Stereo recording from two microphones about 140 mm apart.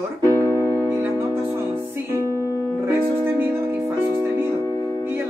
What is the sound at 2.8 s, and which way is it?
Music, 15° right (ahead or behind).